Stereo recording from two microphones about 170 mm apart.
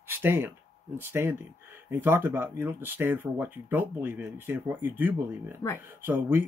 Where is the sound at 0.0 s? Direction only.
15° right (ahead or behind).